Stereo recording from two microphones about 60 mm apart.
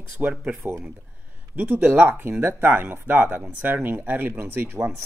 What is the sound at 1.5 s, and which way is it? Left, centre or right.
Speech, right.